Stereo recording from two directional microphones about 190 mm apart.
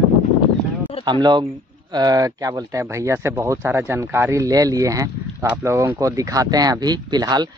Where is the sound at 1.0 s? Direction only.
25° right (ahead or behind).